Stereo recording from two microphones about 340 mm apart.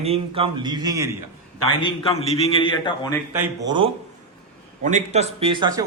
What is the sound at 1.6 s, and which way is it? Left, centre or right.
A man's voice, centre.